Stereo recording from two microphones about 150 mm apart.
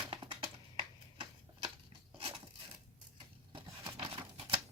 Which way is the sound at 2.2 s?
40° right (ahead or behind).